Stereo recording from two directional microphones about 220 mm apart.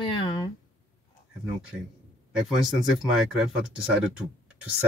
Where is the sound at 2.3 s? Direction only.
Centre (ahead or behind).